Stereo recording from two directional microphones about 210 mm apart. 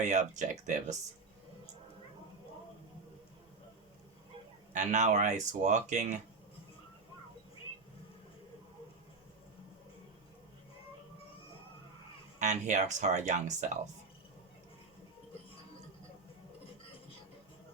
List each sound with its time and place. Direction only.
0.0 s speech: 35° right (ahead or behind)
4.7 s speech: 35° right (ahead or behind)
12.4 s speech: 35° right (ahead or behind)